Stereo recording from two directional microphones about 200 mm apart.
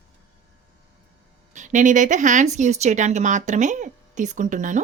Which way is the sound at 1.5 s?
40° right (ahead or behind).